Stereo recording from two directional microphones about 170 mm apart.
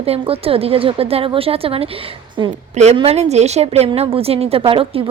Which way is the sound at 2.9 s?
35° right (ahead or behind).